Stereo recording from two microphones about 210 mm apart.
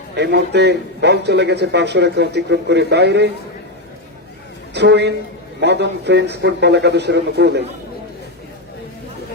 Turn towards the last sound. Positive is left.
turn(degrees=-55)  # may be behind; listen again after turning